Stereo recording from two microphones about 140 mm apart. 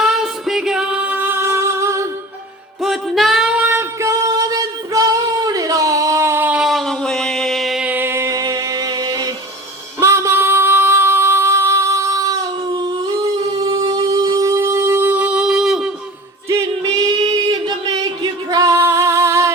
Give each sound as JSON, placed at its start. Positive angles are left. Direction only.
{"t": 0.0, "sound": "singing", "side_deg": -5}
{"t": 2.8, "sound": "singing", "side_deg": 0}
{"t": 10.0, "sound": "female singing", "side_deg": -20}
{"t": 13.7, "sound": "music", "side_deg": -30}
{"t": 17.5, "sound": "music", "side_deg": -30}